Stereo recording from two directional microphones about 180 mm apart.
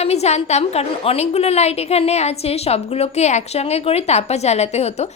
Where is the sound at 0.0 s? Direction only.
35° left (ahead or behind).